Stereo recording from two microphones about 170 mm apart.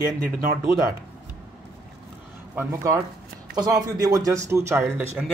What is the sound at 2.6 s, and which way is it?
A man's voice, 15° right (ahead or behind).